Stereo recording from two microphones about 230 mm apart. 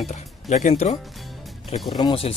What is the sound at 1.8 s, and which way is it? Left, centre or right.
Speech, left.